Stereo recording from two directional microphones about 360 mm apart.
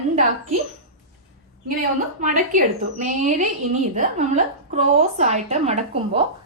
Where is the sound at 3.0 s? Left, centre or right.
Centre.